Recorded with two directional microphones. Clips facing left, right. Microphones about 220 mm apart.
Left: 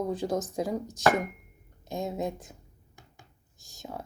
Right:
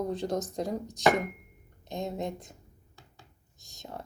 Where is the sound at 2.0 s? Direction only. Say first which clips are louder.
Left 2 dB; 5° left (ahead or behind).